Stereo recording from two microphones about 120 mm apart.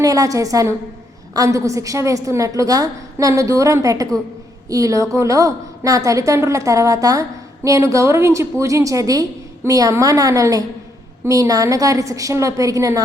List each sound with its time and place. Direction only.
0.0 s a woman's voice: 30° right (ahead or behind)